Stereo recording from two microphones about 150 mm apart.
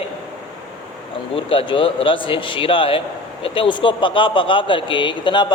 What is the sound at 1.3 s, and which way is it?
A man's voice, 40° left (ahead or behind).